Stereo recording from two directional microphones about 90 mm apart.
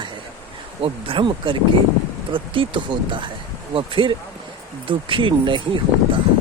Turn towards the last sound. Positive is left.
turn(degrees=-65)  # may be behind; listen again after turning